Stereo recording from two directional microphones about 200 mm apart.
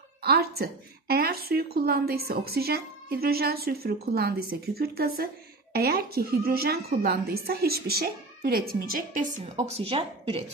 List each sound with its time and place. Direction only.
0.2 s a woman's voice: 50° right (ahead or behind); by 10.4 s 30° right (ahead or behind)